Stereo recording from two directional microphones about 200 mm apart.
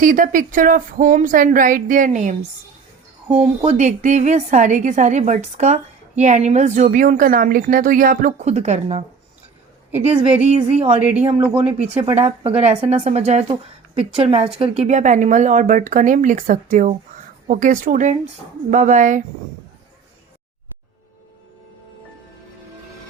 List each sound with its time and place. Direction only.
0.0 s a woman's voice: 40° right (ahead or behind)
3.6 s a woman's voice: 35° right (ahead or behind)
10.8 s speech: 5° right (ahead or behind)
12.1 s a woman's voice: 30° right (ahead or behind)